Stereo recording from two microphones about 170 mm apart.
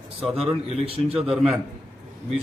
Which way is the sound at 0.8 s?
35° right (ahead or behind).